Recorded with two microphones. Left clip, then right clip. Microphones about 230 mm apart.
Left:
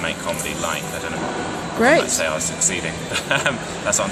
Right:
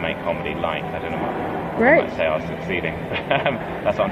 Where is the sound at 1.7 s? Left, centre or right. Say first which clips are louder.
Even; left.